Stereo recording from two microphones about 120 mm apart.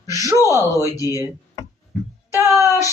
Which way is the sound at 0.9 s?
30° left (ahead or behind).